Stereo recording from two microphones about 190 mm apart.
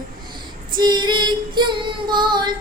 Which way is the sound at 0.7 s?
25° right (ahead or behind).